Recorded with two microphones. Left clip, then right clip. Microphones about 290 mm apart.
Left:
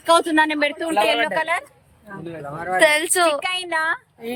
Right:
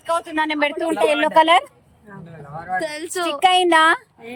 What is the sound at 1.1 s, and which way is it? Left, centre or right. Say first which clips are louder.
Speech: right 6 dB; right.